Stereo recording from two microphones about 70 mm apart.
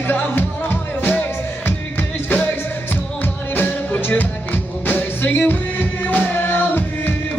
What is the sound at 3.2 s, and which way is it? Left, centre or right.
Music, left.